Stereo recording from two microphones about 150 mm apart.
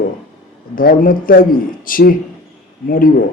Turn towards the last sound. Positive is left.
turn(degrees=70)  # may be behind; listen again after turning